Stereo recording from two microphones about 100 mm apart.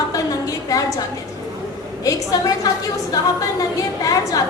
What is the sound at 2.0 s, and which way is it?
A woman's voice, 35° left (ahead or behind).